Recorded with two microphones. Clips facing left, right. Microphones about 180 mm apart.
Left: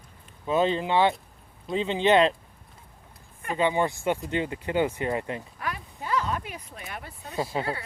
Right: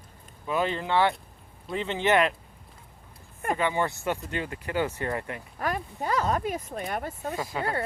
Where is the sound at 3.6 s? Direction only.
20° left (ahead or behind).